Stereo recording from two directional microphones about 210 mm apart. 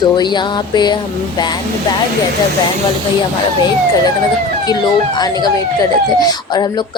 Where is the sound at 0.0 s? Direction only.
20° left (ahead or behind).